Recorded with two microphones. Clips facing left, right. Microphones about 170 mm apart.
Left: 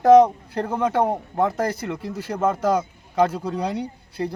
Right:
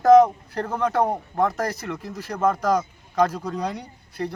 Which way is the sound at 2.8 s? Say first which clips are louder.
Left 1 dB; 10° left (ahead or behind).